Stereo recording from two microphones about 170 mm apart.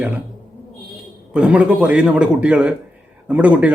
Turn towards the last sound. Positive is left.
turn(degrees=-10)  # may be behind; listen again after turning